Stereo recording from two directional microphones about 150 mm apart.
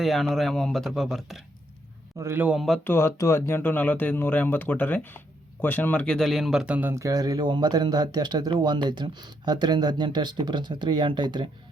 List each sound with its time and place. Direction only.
0.0 s a man's voice: centre (ahead or behind)
2.1 s speech: 15° right (ahead or behind)
2.6 s a man's voice: centre (ahead or behind)
2.8 s speech: 15° left (ahead or behind); by 11.4 s 30° right (ahead or behind)